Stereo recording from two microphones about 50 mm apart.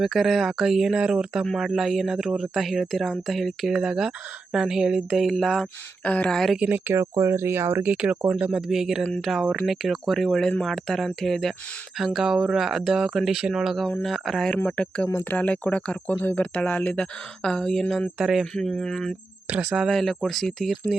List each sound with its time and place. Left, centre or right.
0.0 s speech: centre
3.7 s speech: centre
5.2 s speech: centre
6.0 s speech: left
6.7 s speech: right
6.9 s speech: right
7.9 s speech: right
8.6 s speech: centre
14.8 s speech: left
15.2 s speech: left; by 18.0 s centre
18.2 s speech: centre
18.7 s speech: centre
19.5 s speech: right
19.9 s speech: centre